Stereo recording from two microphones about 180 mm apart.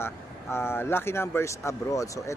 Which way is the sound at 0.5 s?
15° left (ahead or behind).